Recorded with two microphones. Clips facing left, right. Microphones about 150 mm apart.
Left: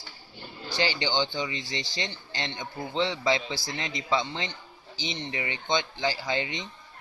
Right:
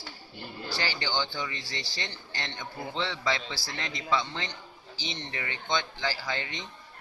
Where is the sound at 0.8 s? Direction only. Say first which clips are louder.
Left 5 dB; 20° left (ahead or behind).